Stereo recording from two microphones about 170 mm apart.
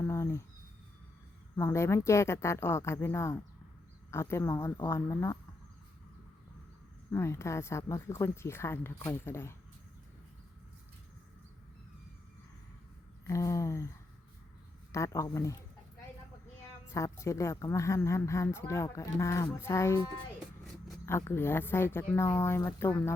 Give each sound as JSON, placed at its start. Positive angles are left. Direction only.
{"t": 0.0, "sound": "a sound", "side_deg": 15}
{"t": 1.5, "sound": "a woman's voice", "side_deg": 15}
{"t": 7.1, "sound": "a woman's voice", "side_deg": 15}
{"t": 13.2, "sound": "a woman's voice", "side_deg": 15}
{"t": 14.9, "sound": "a woman's voice", "side_deg": 20}
{"t": 16.9, "sound": "a woman's voice", "side_deg": 15}
{"t": 21.1, "sound": "a woman's voice", "side_deg": 15}